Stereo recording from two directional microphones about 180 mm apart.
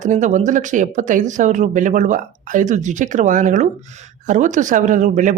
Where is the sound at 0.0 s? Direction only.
45° right (ahead or behind).